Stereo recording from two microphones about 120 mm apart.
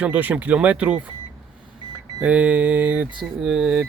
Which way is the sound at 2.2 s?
10° right (ahead or behind).